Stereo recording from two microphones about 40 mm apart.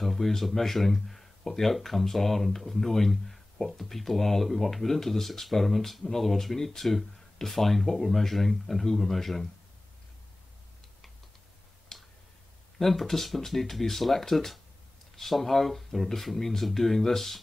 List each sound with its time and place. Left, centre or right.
0.0 s speech: centre
11.9 s tick: centre
12.7 s speech: centre